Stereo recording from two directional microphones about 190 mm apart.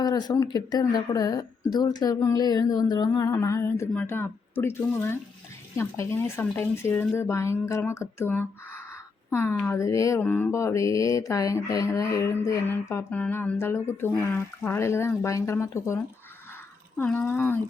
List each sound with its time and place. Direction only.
0.0 s a woman's voice: 20° left (ahead or behind)
5.7 s mantra: 15° left (ahead or behind)
17.0 s mantra: 10° left (ahead or behind)